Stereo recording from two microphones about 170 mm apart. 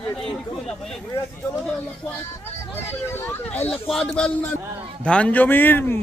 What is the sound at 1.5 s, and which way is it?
A man's voice, 10° left (ahead or behind).